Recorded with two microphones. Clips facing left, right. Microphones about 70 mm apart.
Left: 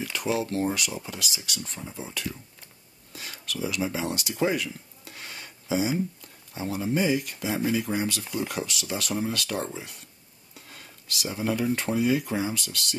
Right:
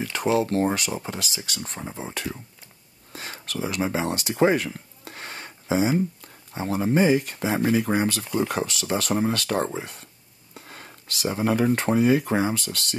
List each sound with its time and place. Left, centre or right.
0.0 s speech: right
3.1 s a sound: right
6.5 s speech: right